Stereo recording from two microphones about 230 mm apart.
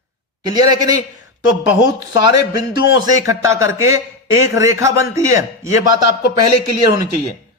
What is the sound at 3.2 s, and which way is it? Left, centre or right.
A man's voice, centre.